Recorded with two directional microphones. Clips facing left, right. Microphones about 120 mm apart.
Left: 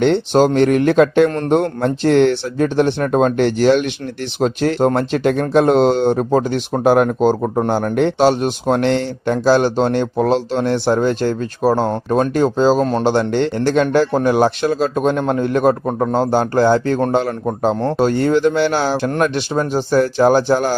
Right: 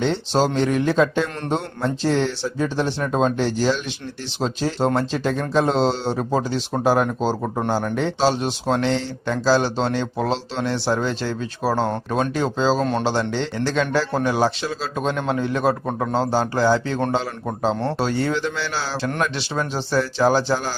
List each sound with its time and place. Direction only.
0.0 s speech: 60° left (ahead or behind); by 13.1 s 40° left (ahead or behind)
13.1 s speech: 55° left (ahead or behind)